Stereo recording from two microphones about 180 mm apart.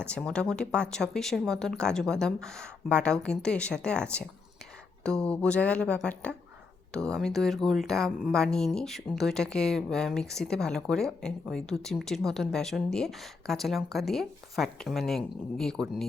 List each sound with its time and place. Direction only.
0.0 s speech: 5° left (ahead or behind)